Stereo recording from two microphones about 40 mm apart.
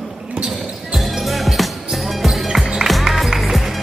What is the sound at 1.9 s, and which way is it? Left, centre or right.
Music, centre.